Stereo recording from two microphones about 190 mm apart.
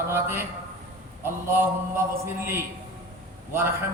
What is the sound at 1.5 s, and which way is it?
A man's voice, 15° right (ahead or behind).